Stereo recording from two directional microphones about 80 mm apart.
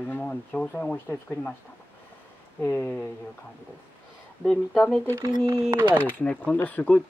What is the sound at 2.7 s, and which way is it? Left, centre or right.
Speech, centre.